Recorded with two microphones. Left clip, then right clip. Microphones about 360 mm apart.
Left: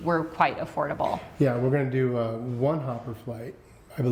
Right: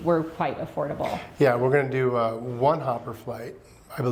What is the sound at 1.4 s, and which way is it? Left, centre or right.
A man's voice, right.